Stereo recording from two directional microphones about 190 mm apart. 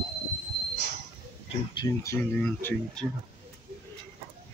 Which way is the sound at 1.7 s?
25° left (ahead or behind).